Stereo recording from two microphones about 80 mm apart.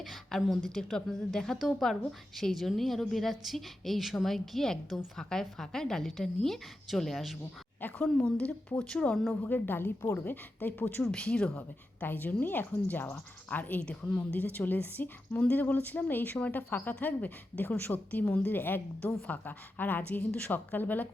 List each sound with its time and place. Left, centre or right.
0.0 s a woman's voice: centre
7.9 s speech: centre
9.4 s a woman's voice: left
11.0 s speech: centre
11.5 s a woman's voice: left